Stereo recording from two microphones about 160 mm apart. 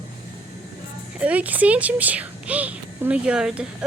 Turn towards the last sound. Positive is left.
turn(degrees=-5)  # may be behind; listen again after turning